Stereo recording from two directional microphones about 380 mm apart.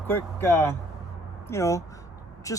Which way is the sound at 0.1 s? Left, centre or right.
Centre.